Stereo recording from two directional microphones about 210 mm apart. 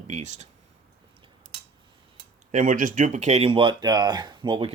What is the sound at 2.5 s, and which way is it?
Speech, 40° right (ahead or behind).